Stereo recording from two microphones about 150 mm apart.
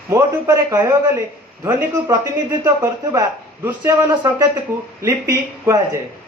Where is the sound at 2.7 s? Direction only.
15° right (ahead or behind).